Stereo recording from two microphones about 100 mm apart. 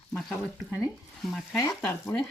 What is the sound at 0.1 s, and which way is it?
Speech, 5° left (ahead or behind).